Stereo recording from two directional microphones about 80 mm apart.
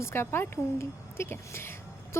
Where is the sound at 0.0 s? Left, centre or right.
Left.